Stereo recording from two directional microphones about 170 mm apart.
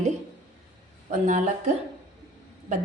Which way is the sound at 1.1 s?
45° right (ahead or behind).